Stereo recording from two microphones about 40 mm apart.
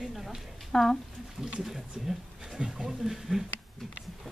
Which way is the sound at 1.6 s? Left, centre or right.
Centre.